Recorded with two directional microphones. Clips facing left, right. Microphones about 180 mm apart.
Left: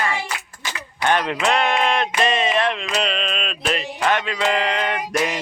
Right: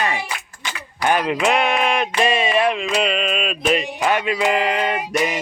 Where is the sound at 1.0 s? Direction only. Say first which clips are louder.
Right 2 dB; 5° right (ahead or behind).